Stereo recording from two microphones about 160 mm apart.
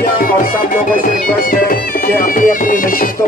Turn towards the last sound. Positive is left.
turn(degrees=60)  # may be behind; listen again after turning